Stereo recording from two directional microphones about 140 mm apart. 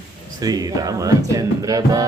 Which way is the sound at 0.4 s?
25° right (ahead or behind).